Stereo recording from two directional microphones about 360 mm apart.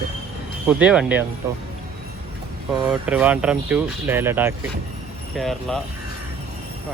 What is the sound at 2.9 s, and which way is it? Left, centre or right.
Speech, centre.